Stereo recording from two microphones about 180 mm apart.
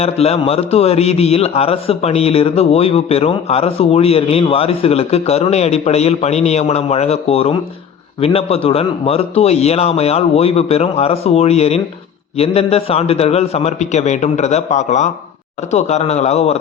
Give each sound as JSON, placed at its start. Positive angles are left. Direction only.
{"t": 0.0, "sound": "a man's voice", "side_deg": 35}